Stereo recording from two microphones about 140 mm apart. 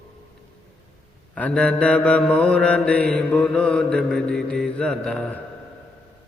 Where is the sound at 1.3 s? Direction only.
10° left (ahead or behind).